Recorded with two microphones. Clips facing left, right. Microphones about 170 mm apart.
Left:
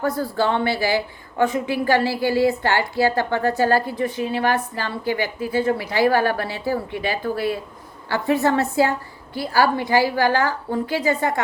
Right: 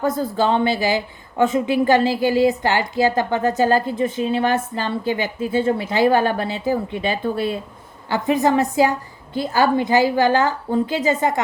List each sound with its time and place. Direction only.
0.0 s a woman's voice: 20° right (ahead or behind)